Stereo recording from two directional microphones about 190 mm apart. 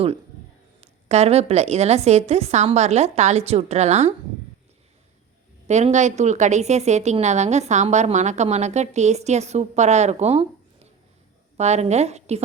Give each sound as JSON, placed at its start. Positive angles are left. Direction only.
{"t": 0.8, "sound": "a woman's voice", "side_deg": -35}
{"t": 5.6, "sound": "a woman's voice", "side_deg": -35}